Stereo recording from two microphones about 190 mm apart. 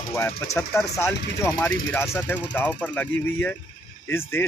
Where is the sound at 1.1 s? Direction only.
65° left (ahead or behind).